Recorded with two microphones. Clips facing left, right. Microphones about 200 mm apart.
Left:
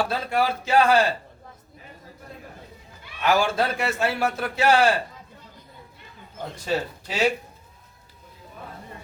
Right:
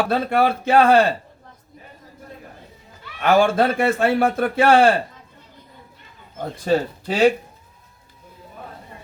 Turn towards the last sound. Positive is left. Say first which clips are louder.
# right 7 dB
turn(degrees=-55)  # may be behind; listen again after turning